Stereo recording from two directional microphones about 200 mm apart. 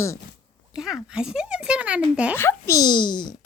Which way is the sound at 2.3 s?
10° left (ahead or behind).